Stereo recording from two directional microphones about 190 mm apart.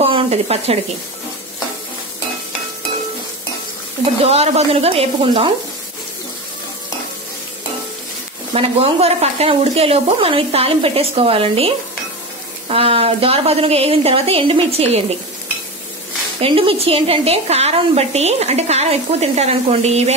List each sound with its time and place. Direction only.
0.0 s a sound: 35° right (ahead or behind)
4.2 s speech: 35° right (ahead or behind)
8.5 s a woman's voice: 30° right (ahead or behind)
16.3 s a woman's voice: 30° right (ahead or behind)